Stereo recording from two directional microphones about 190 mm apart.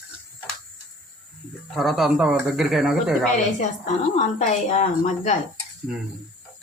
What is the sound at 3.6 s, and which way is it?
A woman's voice, 40° left (ahead or behind).